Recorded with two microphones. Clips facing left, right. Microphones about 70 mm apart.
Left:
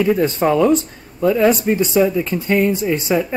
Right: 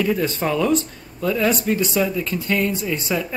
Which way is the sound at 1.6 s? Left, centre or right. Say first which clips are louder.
Left 4 dB; left.